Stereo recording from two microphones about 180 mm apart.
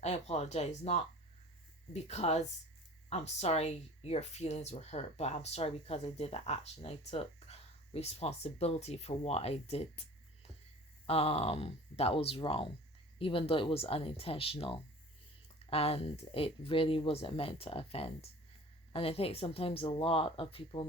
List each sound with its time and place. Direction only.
0.0 s speech: 35° left (ahead or behind)